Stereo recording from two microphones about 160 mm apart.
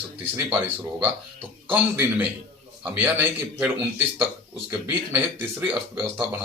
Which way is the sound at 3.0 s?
10° right (ahead or behind).